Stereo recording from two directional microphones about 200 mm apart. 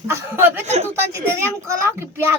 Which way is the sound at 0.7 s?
35° right (ahead or behind).